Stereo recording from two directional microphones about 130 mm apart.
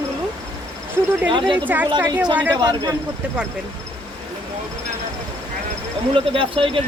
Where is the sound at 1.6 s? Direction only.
15° right (ahead or behind).